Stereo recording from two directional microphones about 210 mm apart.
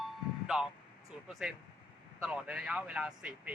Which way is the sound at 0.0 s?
Centre (ahead or behind).